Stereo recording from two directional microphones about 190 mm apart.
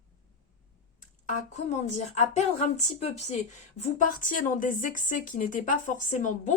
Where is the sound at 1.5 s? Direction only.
40° left (ahead or behind).